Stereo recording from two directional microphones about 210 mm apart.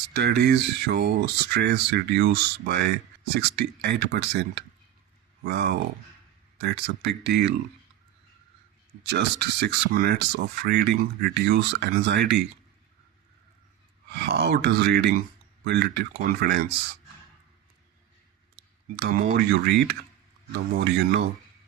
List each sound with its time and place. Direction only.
0.1 s speech: 50° right (ahead or behind)
9.0 s speech: 50° right (ahead or behind)
14.1 s speech: 55° right (ahead or behind)
18.9 s speech: 50° right (ahead or behind)
20.7 s speech: 50° right (ahead or behind)